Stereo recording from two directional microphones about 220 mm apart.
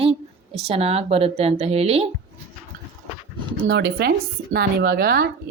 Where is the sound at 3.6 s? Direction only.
50° right (ahead or behind).